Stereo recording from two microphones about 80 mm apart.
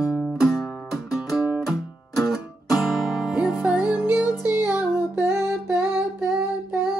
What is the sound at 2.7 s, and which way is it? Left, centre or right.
Music, centre.